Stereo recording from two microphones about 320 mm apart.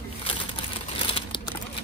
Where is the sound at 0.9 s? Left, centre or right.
Centre.